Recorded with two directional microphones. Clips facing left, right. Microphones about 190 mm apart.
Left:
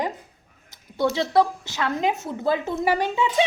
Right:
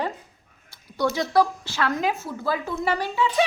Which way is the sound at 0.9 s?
25° left (ahead or behind).